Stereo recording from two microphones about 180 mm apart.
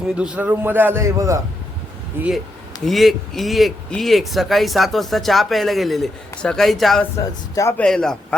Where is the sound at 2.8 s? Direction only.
Centre (ahead or behind).